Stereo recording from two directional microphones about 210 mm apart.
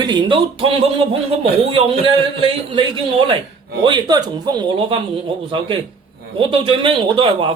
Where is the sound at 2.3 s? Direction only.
25° right (ahead or behind).